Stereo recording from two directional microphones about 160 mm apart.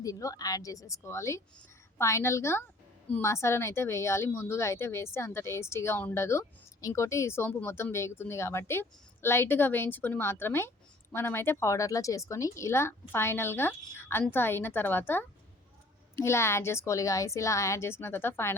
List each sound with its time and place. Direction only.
0.0 s a woman's voice: 20° left (ahead or behind)